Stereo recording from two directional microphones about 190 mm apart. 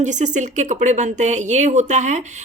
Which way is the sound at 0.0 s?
40° right (ahead or behind).